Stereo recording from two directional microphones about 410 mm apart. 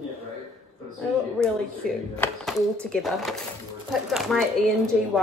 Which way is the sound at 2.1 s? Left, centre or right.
Centre.